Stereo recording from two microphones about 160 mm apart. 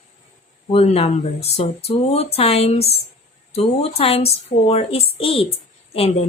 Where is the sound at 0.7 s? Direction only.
40° left (ahead or behind).